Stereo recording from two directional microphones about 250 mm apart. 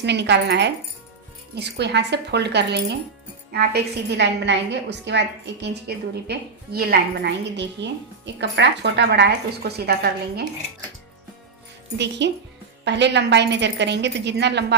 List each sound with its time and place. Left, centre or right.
0.0 s a woman's voice: right
11.9 s speech: right